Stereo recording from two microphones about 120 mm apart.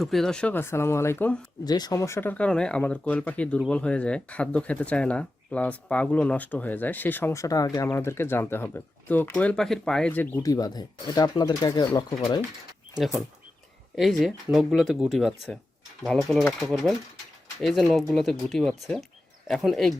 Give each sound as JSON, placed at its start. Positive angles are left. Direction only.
{"t": 0.0, "sound": "speech", "side_deg": 0}
{"t": 0.6, "sound": "speech", "side_deg": 20}
{"t": 1.6, "sound": "speech", "side_deg": 35}
{"t": 10.4, "sound": "speech", "side_deg": 30}
{"t": 13.0, "sound": "speech", "side_deg": 0}